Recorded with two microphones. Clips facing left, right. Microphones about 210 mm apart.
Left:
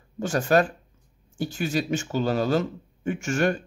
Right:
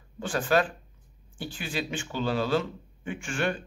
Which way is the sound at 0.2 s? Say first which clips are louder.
Left 4 dB; 45° left (ahead or behind).